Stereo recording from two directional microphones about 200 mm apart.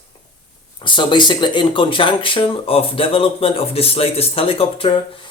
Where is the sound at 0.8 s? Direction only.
25° left (ahead or behind).